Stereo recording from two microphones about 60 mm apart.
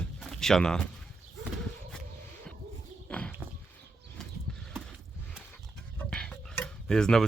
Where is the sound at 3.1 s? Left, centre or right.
Centre.